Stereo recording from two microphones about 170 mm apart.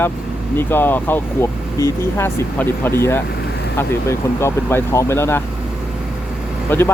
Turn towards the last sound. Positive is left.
turn(degrees=15)  # may be behind; listen again after turning